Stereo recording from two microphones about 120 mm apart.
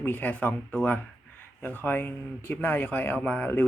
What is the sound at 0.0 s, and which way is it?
Speech, 15° left (ahead or behind).